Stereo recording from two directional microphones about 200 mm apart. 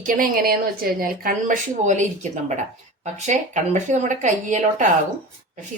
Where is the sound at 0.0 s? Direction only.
45° right (ahead or behind).